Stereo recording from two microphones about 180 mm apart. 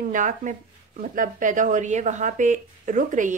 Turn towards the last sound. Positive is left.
turn(degrees=-45)  # may be behind; listen again after turning